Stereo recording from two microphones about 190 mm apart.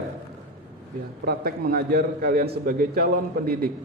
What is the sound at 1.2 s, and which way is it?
A man's voice, 55° right (ahead or behind).